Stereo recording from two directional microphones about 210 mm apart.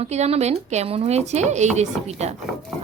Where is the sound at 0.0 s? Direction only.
30° right (ahead or behind).